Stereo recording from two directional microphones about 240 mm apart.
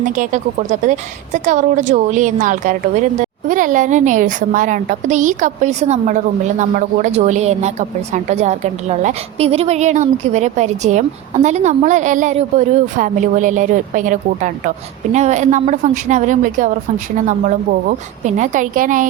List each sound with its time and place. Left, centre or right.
0.0 s a woman's voice: right